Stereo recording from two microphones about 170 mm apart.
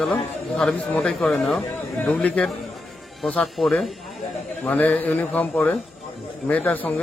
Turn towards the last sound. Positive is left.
turn(degrees=10)  # may be behind; listen again after turning